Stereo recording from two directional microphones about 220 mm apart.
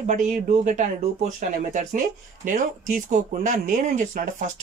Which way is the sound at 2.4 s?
35° right (ahead or behind).